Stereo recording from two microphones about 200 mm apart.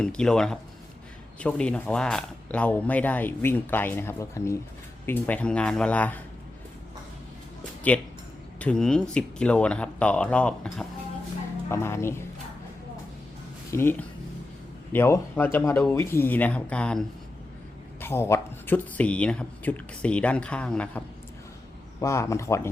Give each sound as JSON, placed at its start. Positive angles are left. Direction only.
{"t": 0.0, "sound": "speech", "side_deg": 5}
{"t": 7.9, "sound": "speech", "side_deg": 10}
{"t": 13.7, "sound": "speech", "side_deg": 10}
{"t": 18.0, "sound": "speech", "side_deg": 10}
{"t": 22.0, "sound": "speech", "side_deg": 15}